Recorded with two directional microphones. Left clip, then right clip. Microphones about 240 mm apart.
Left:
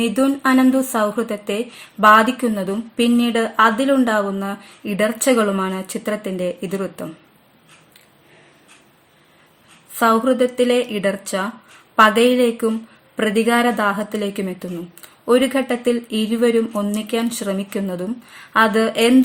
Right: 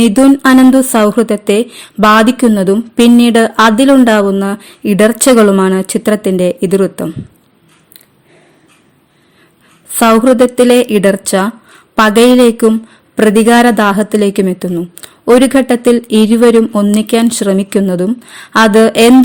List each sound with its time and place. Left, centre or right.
0.0 s speech: right
9.9 s speech: right